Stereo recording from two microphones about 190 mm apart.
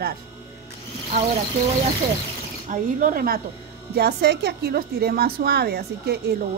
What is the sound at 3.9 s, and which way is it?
A woman's voice, 60° right (ahead or behind).